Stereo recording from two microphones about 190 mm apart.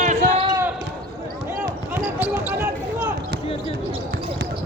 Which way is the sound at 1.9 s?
10° right (ahead or behind).